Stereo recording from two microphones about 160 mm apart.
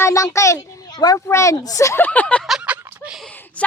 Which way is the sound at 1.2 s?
20° left (ahead or behind).